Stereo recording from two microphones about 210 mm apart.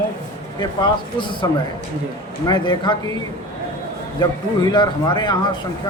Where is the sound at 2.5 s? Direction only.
20° left (ahead or behind).